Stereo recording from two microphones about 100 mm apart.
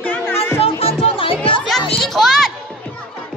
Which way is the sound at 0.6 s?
75° left (ahead or behind).